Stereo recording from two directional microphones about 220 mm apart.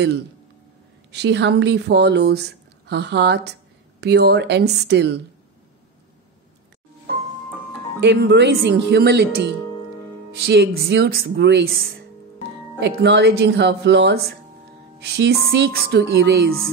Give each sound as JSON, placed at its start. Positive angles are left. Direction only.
{"t": 1.1, "sound": "speech", "side_deg": -50}
{"t": 8.0, "sound": "speech", "side_deg": -50}
{"t": 12.8, "sound": "speech", "side_deg": -50}